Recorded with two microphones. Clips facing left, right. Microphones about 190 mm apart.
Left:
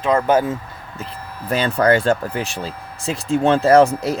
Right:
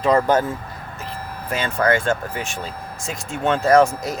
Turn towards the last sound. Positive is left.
turn(degrees=35)  # may be behind; listen again after turning